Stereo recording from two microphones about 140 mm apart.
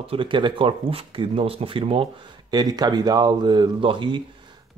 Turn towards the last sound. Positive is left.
turn(degrees=-35)  # may be behind; listen again after turning